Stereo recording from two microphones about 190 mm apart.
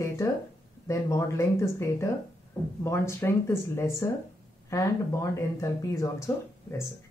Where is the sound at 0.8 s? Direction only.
15° left (ahead or behind).